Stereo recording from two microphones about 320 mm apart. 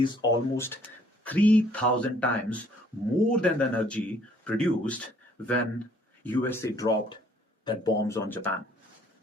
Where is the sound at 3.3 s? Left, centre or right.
Centre.